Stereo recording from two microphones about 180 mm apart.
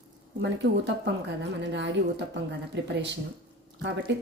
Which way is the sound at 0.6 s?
80° right.